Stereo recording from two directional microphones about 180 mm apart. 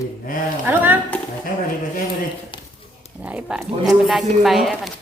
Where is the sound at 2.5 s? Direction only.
30° left (ahead or behind).